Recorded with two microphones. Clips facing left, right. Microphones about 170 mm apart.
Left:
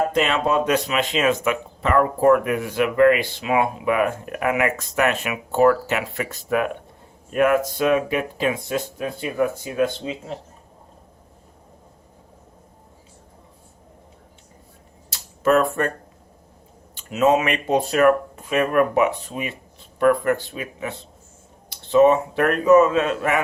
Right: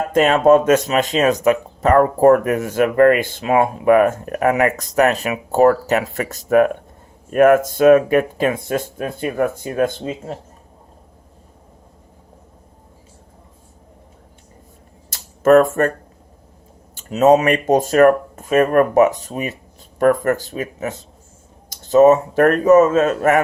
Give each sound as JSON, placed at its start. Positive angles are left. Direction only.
{"t": 0.1, "sound": "speech", "side_deg": -45}
{"t": 15.1, "sound": "a sound", "side_deg": -45}
{"t": 16.9, "sound": "speech", "side_deg": -40}